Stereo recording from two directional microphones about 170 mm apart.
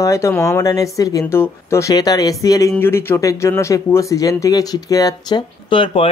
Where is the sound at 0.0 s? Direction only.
15° left (ahead or behind).